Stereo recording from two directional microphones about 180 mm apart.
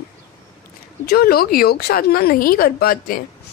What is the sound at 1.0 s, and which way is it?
Speech, 60° left (ahead or behind).